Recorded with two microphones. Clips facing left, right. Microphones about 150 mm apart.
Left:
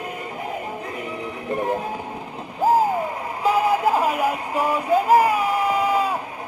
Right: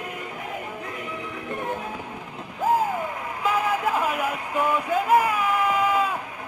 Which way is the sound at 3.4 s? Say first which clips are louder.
Left 5 dB; 35° left (ahead or behind).